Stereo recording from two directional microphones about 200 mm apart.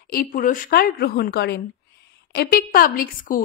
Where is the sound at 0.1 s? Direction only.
45° left (ahead or behind).